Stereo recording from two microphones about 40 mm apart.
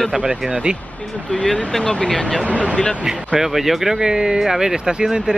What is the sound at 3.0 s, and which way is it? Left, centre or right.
Speech, centre.